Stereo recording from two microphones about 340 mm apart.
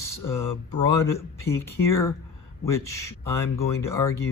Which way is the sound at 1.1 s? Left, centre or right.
Centre.